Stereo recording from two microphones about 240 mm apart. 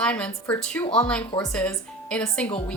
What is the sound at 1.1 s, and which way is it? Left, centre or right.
A woman's voice, centre.